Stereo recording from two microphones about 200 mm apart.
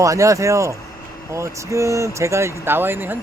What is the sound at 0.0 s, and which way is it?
Speech, 15° right (ahead or behind).